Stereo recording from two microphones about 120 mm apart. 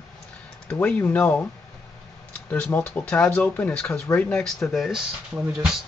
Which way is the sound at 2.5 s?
15° left (ahead or behind).